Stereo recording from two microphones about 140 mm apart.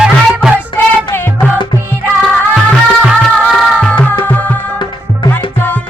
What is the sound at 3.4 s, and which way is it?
Music, 5° left (ahead or behind).